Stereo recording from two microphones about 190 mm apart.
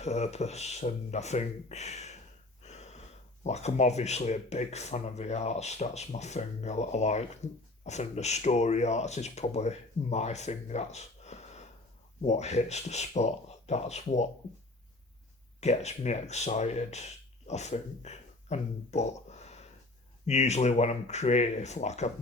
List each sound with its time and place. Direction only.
0.0 s speech: 35° left (ahead or behind)
2.6 s gasp: 35° left (ahead or behind)
3.4 s speech: 35° left (ahead or behind)
15.6 s speech: 35° left (ahead or behind)